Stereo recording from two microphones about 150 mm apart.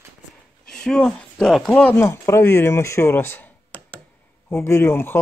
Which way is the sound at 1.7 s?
10° left (ahead or behind).